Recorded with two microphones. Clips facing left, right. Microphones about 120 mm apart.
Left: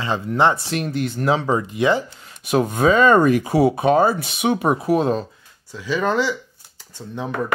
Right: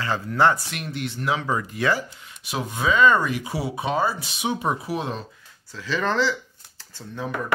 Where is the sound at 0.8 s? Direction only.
45° left (ahead or behind); by 2.0 s 20° left (ahead or behind).